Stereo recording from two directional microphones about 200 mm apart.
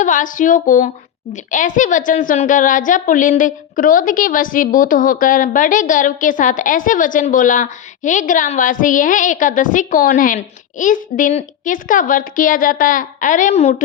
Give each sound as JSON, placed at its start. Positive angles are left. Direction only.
{"t": 0.0, "sound": "a woman's voice", "side_deg": 40}